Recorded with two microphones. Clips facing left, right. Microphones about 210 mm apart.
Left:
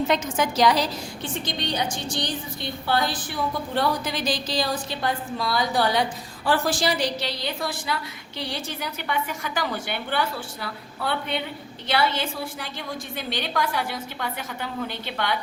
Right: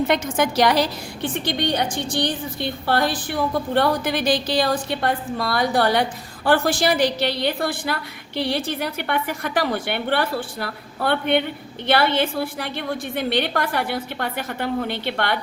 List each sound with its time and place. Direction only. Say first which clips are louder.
0.1 s a woman's voice: right 3 dB; 60° right (ahead or behind)